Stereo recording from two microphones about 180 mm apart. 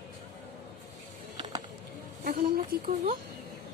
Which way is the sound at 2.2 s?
55° right (ahead or behind).